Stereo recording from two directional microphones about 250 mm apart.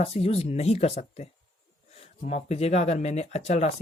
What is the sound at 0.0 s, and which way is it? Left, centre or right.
Speech, left.